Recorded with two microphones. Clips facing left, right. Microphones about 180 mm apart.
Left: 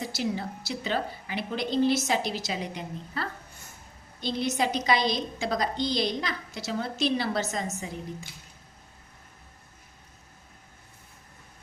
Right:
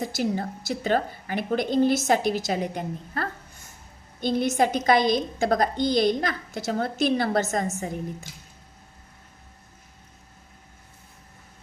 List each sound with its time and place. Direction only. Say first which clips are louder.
0.0 s a woman's voice: right 4 dB; 50° right (ahead or behind)